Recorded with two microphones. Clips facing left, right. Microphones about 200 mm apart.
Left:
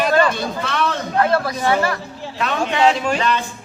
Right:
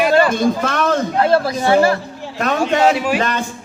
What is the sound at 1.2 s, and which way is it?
Speech, 30° right (ahead or behind).